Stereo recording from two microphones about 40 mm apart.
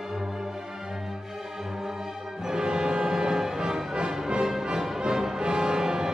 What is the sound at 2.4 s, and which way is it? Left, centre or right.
Music, centre.